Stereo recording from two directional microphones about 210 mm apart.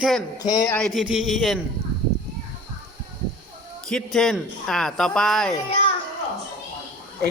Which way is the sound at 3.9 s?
Centre (ahead or behind).